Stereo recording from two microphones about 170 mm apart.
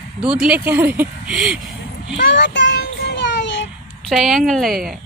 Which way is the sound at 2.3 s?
90° left.